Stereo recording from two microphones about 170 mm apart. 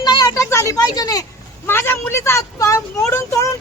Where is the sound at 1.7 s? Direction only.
15° left (ahead or behind).